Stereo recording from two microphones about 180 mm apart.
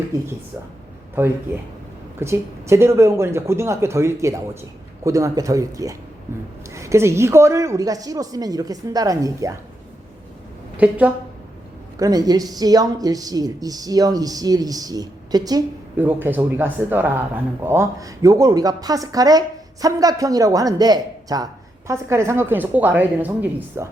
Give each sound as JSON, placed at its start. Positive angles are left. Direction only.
{"t": 0.1, "sound": "speech", "side_deg": -20}
{"t": 10.8, "sound": "speech", "side_deg": -10}
{"t": 11.9, "sound": "speech", "side_deg": -20}
{"t": 16.0, "sound": "speech", "side_deg": -10}